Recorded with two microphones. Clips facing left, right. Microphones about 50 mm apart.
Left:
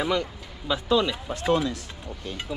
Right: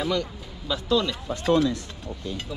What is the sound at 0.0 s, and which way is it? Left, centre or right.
Speech, centre.